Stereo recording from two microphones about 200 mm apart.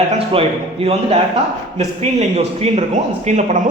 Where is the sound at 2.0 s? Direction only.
30° right (ahead or behind).